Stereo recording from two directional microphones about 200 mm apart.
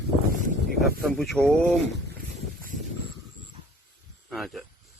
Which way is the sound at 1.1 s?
Centre (ahead or behind).